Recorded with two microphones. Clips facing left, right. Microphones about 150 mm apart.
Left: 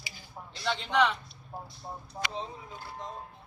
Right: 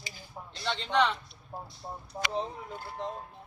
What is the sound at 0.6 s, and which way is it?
Speech, 5° left (ahead or behind).